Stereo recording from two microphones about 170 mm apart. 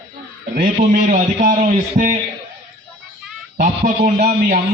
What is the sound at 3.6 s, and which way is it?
Speech, 40° right (ahead or behind).